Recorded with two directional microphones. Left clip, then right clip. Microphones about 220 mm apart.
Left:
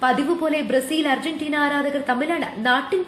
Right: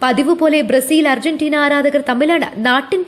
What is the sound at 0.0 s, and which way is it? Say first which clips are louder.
A woman's voice: right 7 dB; 40° right (ahead or behind).